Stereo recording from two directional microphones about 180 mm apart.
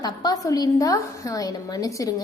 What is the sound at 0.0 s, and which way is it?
A woman's voice, 20° left (ahead or behind).